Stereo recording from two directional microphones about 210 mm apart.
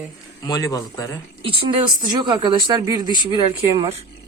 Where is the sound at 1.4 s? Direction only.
25° right (ahead or behind).